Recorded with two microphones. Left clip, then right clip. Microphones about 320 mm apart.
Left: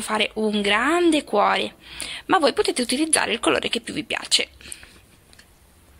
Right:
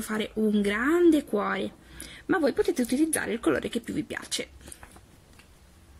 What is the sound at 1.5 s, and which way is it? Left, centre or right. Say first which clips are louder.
Speech: left 8 dB; left.